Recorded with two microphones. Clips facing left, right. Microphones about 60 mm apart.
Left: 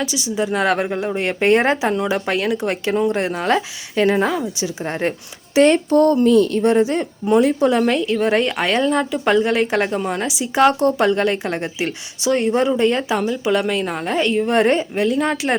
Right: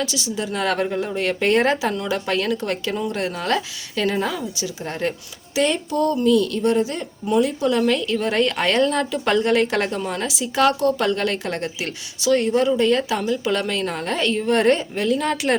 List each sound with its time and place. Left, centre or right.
0.0 s speech: centre
2.9 s speech: left
5.5 s a woman's voice: left
7.7 s a woman's voice: left